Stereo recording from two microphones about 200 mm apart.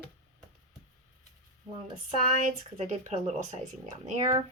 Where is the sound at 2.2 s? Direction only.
40° right (ahead or behind).